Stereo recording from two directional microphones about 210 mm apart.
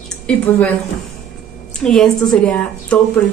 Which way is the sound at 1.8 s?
Centre (ahead or behind).